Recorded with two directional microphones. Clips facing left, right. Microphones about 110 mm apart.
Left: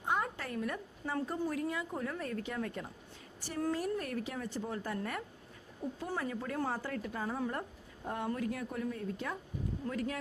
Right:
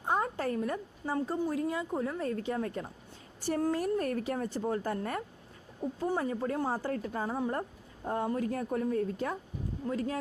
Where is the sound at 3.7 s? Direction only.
45° right (ahead or behind).